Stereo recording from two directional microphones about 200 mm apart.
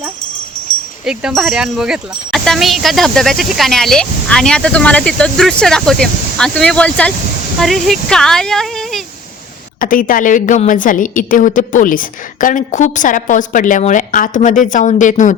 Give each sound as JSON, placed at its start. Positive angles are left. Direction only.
{"t": 1.0, "sound": "speech", "side_deg": -5}
{"t": 9.8, "sound": "a woman's voice", "side_deg": 45}